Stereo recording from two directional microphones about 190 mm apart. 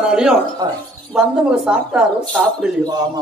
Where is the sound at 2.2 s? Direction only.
5° left (ahead or behind).